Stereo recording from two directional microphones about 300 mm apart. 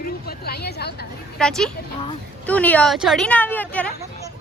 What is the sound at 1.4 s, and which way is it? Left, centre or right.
Speech, centre.